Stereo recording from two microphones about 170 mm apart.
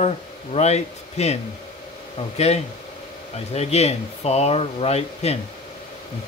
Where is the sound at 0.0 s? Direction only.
40° left (ahead or behind).